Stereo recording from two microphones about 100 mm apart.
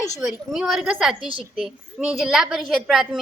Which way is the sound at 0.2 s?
5° right (ahead or behind).